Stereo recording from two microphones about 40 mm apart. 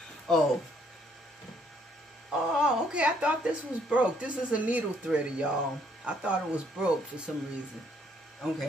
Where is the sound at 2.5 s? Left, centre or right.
Right.